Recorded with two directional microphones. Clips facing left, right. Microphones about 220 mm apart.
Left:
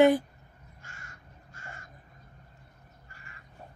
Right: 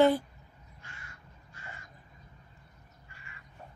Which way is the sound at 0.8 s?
45° left (ahead or behind).